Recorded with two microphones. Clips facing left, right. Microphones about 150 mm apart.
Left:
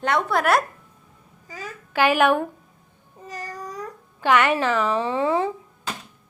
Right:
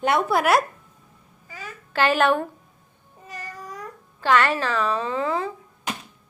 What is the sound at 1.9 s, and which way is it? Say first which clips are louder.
Speech: left 1 dB; 10° left (ahead or behind).